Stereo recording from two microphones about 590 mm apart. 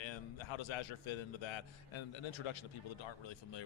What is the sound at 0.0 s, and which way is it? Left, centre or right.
Speech, left.